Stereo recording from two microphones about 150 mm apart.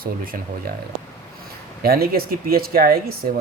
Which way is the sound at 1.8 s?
80° right.